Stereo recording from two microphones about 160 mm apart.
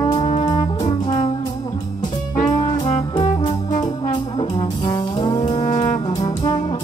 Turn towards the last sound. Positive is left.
turn(degrees=30)  # may be behind; listen again after turning